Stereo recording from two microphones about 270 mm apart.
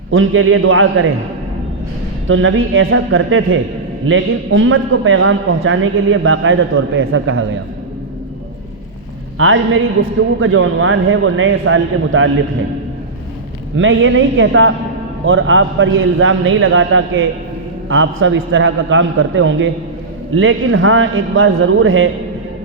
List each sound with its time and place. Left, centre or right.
0.1 s a man's voice: right
2.2 s a man's voice: right
9.4 s a man's voice: right
13.7 s a man's voice: right